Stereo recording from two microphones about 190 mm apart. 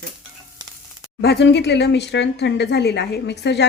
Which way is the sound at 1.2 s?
60° left (ahead or behind).